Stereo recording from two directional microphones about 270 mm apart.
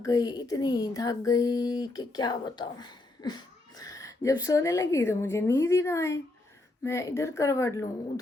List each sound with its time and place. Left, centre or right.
0.0 s speech: centre